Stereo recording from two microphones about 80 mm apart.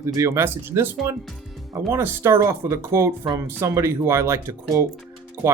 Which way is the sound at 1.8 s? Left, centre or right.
Right.